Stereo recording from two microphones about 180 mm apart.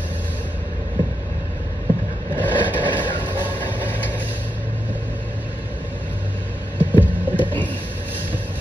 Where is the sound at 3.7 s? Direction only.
10° right (ahead or behind).